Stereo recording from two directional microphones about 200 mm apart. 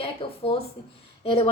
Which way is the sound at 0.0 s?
25° left (ahead or behind).